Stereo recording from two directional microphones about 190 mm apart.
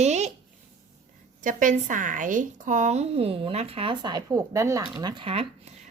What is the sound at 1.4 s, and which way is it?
Speech, 45° right (ahead or behind).